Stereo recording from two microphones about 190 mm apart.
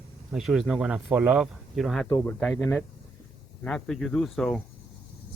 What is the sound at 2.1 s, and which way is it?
Speech, 15° left (ahead or behind).